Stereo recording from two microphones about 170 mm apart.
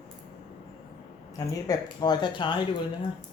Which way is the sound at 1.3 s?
20° left (ahead or behind).